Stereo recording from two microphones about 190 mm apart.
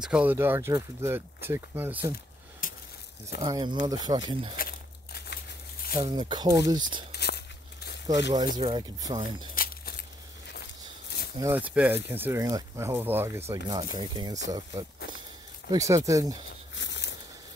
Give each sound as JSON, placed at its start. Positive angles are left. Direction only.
{"t": 0.0, "sound": "speech", "side_deg": -5}
{"t": 2.6, "sound": "a sound", "side_deg": 45}
{"t": 3.3, "sound": "speech", "side_deg": -20}
{"t": 4.6, "sound": "crumpling", "side_deg": 55}
{"t": 5.9, "sound": "speech", "side_deg": -20}
{"t": 7.1, "sound": "a sound", "side_deg": 60}
{"t": 8.5, "sound": "speech", "side_deg": -25}
{"t": 11.3, "sound": "speech", "side_deg": -10}
{"t": 13.7, "sound": "speech", "side_deg": -25}
{"t": 16.7, "sound": "a sound", "side_deg": 70}